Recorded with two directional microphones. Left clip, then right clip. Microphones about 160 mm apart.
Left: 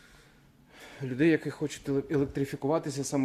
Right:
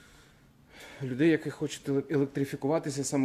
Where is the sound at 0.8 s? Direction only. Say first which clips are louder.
Even; 10° right (ahead or behind).